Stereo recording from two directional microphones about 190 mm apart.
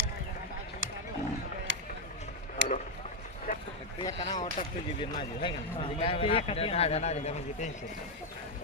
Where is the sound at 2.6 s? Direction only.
70° right (ahead or behind).